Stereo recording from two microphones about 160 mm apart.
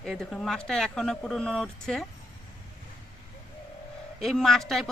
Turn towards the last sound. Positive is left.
turn(degrees=0)  # may be behind; listen again after turning